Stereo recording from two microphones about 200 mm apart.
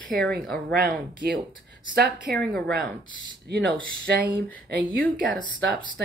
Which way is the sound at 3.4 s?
55° right (ahead or behind).